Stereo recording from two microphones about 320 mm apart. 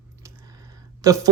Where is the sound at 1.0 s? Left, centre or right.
Centre.